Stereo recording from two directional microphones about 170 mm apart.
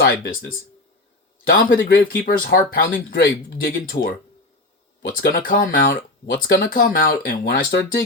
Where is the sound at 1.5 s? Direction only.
60° left (ahead or behind).